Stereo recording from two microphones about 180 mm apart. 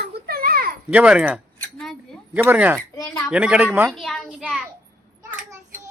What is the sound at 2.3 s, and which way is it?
Speech, 10° right (ahead or behind).